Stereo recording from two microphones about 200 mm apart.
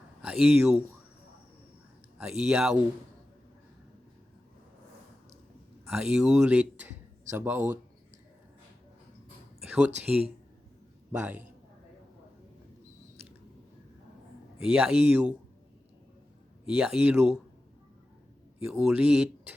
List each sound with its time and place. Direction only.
0.2 s speech: 5° right (ahead or behind)
2.4 s speech: 5° right (ahead or behind)
5.9 s speech: 5° right (ahead or behind)
9.6 s speech: 5° right (ahead or behind)
14.6 s speech: 5° right (ahead or behind)
16.6 s speech: 5° right (ahead or behind)
18.7 s speech: 5° right (ahead or behind)